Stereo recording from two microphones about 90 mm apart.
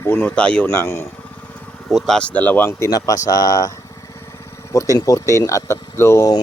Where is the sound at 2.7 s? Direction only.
30° left (ahead or behind).